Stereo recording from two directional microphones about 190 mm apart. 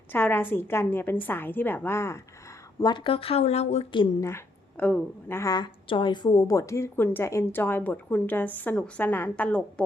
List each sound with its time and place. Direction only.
0.1 s a woman's voice: 10° left (ahead or behind)
2.8 s speech: 25° left (ahead or behind)
4.3 s a woman's voice: 10° left (ahead or behind)